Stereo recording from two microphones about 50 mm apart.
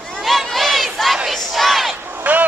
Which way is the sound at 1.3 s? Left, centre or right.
Centre.